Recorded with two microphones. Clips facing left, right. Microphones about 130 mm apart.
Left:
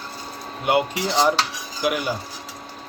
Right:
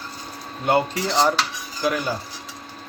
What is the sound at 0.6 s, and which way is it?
Speech, 15° left (ahead or behind).